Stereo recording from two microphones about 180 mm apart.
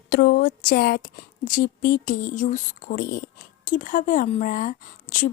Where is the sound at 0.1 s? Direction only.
60° left (ahead or behind).